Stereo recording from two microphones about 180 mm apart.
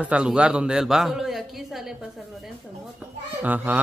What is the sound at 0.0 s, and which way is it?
A man's voice, 5° right (ahead or behind).